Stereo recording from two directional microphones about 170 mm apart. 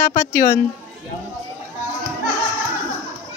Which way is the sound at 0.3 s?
60° left (ahead or behind).